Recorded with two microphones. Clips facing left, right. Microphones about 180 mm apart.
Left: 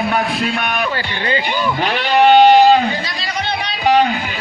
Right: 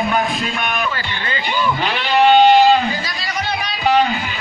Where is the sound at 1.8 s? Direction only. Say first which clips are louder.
Left 2 dB; 55° left (ahead or behind).